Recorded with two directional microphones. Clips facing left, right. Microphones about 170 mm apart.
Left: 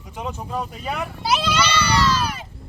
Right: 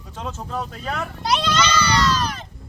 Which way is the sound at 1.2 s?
5° left (ahead or behind).